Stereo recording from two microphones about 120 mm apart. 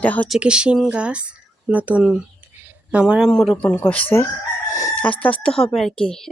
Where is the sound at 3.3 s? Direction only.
5° left (ahead or behind).